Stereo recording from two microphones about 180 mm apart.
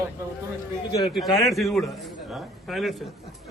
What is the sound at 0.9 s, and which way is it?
A man's voice, centre (ahead or behind).